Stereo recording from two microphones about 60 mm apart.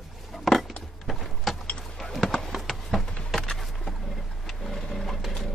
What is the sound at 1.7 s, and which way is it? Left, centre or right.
Vehicle, centre.